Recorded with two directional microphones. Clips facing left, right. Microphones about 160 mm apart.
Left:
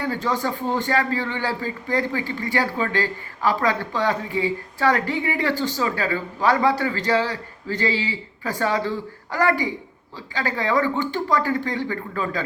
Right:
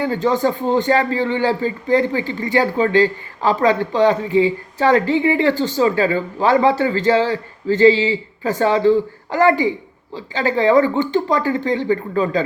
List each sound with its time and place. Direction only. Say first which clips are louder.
0.0 s a man's voice: right 7 dB; 20° right (ahead or behind)